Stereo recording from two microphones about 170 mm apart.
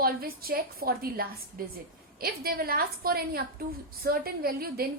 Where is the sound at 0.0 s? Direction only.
60° right (ahead or behind).